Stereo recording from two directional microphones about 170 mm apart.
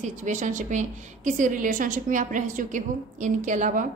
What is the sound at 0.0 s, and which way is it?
A woman's voice, 45° right (ahead or behind).